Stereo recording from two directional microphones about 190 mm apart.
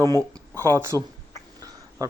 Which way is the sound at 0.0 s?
15° right (ahead or behind).